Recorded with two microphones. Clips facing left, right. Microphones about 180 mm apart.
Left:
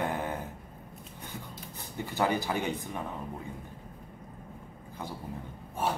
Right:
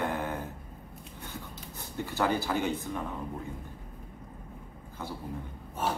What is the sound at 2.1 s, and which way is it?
Speech, 15° left (ahead or behind).